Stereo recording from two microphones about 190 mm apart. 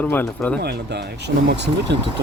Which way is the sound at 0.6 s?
60° right (ahead or behind).